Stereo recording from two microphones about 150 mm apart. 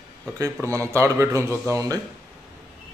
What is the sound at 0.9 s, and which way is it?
Speech, 20° right (ahead or behind).